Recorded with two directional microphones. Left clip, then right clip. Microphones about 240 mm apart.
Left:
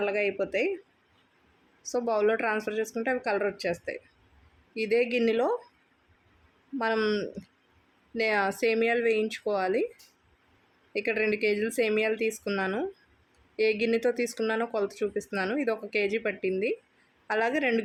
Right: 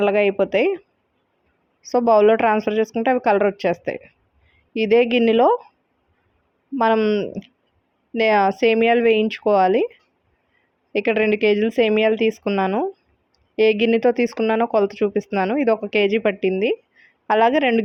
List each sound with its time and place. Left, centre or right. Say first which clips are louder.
0.0 s speech: right 11 dB; right
1.9 s speech: right 12 dB; right
6.7 s speech: right 10 dB; right
10.9 s speech: right 9 dB; right